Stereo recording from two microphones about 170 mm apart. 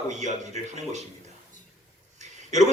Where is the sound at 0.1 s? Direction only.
45° right (ahead or behind).